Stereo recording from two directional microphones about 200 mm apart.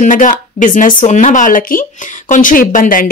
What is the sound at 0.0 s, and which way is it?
Speech, 40° left (ahead or behind).